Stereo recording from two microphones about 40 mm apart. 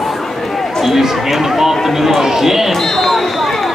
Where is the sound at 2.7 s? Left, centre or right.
Centre.